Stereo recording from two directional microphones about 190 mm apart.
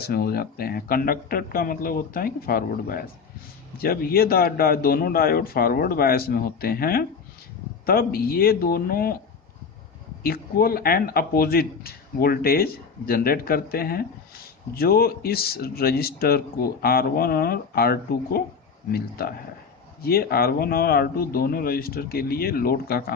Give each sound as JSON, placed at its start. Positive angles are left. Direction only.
{"t": 0.0, "sound": "speech", "side_deg": 55}
{"t": 10.2, "sound": "speech", "side_deg": 50}